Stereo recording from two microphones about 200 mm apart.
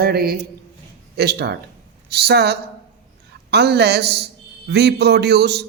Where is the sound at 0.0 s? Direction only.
50° right (ahead or behind).